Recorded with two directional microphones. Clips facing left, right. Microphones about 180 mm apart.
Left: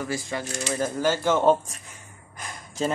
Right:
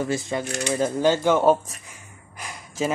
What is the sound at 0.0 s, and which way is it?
Speech, 25° right (ahead or behind).